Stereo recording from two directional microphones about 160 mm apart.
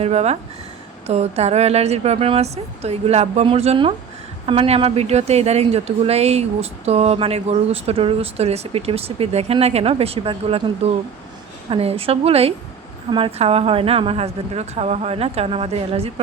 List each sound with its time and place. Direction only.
0.0 s a woman's voice: 40° right (ahead or behind)